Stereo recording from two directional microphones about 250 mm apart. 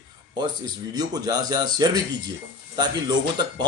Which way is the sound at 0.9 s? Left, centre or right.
Centre.